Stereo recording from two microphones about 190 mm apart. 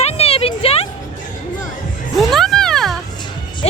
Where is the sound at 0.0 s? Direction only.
35° left (ahead or behind).